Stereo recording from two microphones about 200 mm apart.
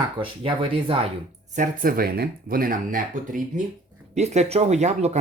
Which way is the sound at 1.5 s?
45° right (ahead or behind).